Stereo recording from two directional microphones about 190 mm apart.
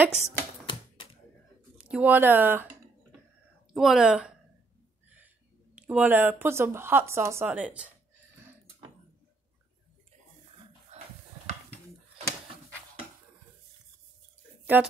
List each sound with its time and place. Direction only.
0.2 s speech: 10° right (ahead or behind)
1.8 s speech: 5° right (ahead or behind)
3.7 s speech: centre (ahead or behind)
5.8 s speech: 10° right (ahead or behind)
10.9 s a sound: 35° right (ahead or behind)
14.6 s a sound: 10° right (ahead or behind)